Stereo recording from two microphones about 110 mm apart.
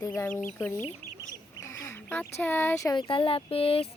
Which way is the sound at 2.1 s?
15° left (ahead or behind).